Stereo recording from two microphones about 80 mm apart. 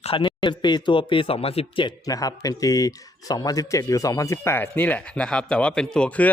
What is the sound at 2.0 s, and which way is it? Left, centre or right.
A man's voice, left.